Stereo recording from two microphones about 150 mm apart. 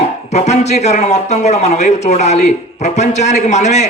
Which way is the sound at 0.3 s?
50° left (ahead or behind).